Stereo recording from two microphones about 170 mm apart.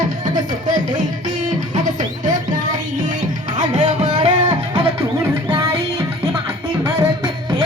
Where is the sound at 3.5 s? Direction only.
45° right (ahead or behind).